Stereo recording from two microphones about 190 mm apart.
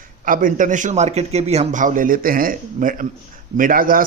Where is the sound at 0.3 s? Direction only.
45° right (ahead or behind).